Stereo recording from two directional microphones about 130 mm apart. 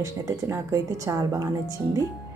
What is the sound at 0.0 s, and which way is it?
A woman's voice, 25° right (ahead or behind).